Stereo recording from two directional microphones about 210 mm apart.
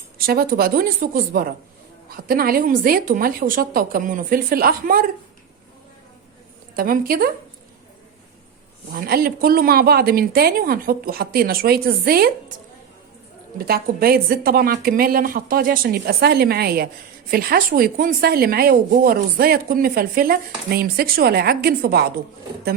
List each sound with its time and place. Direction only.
0.3 s speech: 45° right (ahead or behind)
6.7 s speech: 45° right (ahead or behind)
8.9 s speech: 45° right (ahead or behind)
13.7 s speech: 45° right (ahead or behind)